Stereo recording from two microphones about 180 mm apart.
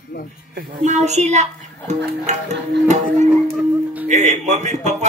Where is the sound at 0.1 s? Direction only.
70° left (ahead or behind).